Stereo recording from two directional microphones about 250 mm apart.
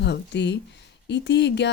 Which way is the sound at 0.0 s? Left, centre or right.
Left.